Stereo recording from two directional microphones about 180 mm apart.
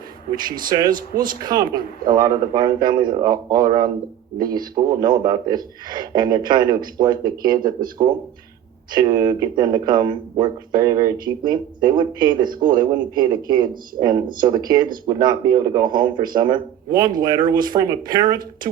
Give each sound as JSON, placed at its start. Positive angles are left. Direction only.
{"t": 0.9, "sound": "speech", "side_deg": -50}
{"t": 1.4, "sound": "speech", "side_deg": -20}